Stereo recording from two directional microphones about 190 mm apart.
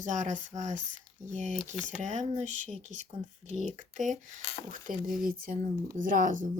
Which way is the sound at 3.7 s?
40° right (ahead or behind).